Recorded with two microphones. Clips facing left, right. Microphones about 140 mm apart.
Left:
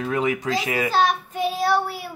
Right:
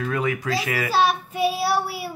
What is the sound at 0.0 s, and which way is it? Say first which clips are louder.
Speech: left 2 dB; 20° left (ahead or behind).